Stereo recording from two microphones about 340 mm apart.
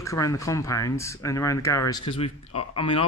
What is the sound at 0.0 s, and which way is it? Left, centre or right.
Speech, centre.